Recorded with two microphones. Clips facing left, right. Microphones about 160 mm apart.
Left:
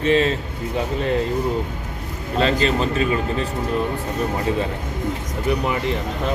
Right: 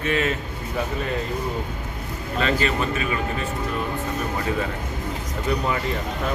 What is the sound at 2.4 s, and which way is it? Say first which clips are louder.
Speech: left 4 dB; 30° left (ahead or behind).